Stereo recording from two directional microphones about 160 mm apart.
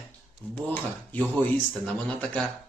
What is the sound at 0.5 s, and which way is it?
Speech, 10° left (ahead or behind).